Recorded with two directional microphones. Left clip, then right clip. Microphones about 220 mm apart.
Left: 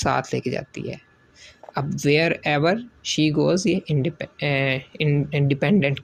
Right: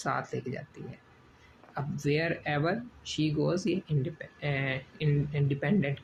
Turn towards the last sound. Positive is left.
turn(degrees=40)  # may be behind; listen again after turning